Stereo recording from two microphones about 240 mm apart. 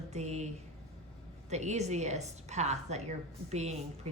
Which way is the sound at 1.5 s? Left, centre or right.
Right.